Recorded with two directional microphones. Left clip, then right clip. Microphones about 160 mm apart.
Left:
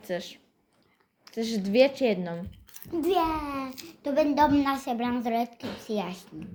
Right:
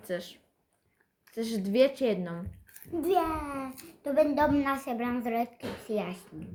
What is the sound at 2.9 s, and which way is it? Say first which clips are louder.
A child's voice: left 2 dB; 30° right (ahead or behind).